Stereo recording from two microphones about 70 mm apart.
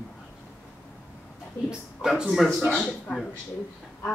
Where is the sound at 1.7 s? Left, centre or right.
Centre.